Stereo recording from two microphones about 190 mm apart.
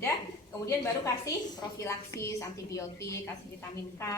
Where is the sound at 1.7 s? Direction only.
15° left (ahead or behind).